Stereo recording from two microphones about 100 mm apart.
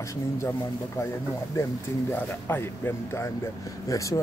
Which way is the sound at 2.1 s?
20° left (ahead or behind).